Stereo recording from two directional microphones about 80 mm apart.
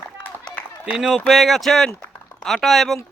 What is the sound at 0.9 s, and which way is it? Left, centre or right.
Speech, centre.